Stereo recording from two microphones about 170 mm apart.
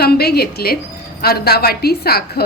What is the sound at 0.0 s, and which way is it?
A woman's voice, 70° left (ahead or behind).